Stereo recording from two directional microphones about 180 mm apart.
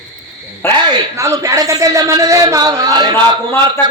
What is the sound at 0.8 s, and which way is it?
Speech, 20° right (ahead or behind).